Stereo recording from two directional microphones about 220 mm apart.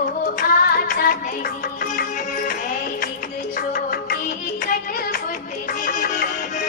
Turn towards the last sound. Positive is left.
turn(degrees=40)  # may be behind; listen again after turning